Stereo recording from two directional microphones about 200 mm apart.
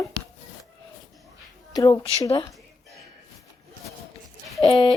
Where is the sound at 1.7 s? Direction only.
15° left (ahead or behind).